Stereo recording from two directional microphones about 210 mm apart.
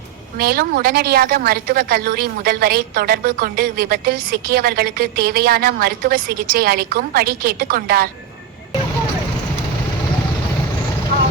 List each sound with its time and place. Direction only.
0.3 s a woman's voice: 45° right (ahead or behind)